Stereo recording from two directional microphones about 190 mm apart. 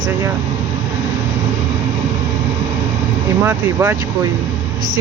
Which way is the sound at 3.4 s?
10° right (ahead or behind).